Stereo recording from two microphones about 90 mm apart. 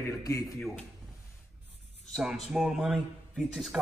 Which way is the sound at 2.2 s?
5° right (ahead or behind).